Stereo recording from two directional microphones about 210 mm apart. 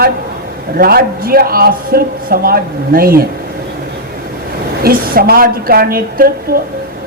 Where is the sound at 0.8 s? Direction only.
45° right (ahead or behind).